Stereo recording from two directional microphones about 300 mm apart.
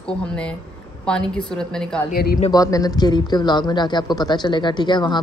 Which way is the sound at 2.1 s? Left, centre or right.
Left.